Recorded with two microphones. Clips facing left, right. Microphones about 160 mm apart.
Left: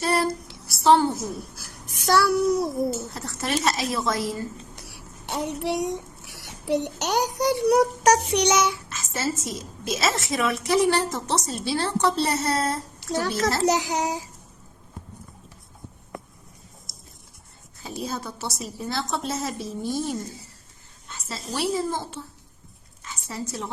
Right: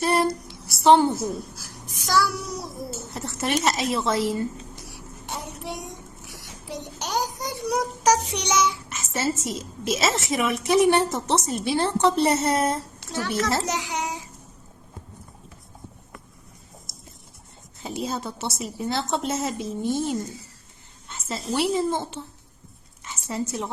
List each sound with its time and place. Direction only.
0.8 s a woman's voice: 20° right (ahead or behind)
1.5 s a child's voice: 60° left (ahead or behind)
3.2 s a woman's voice: 20° right (ahead or behind)
4.9 s a child's voice: 70° left (ahead or behind)
8.9 s a sound: 20° right (ahead or behind)
9.5 s a woman's voice: 25° right (ahead or behind)
13.1 s a child's voice: 35° left (ahead or behind)
17.8 s a woman's voice: 20° right (ahead or behind)
21.1 s a sound: 20° right (ahead or behind)
21.5 s a woman's voice: 20° right (ahead or behind)
23.0 s a sound: 20° right (ahead or behind)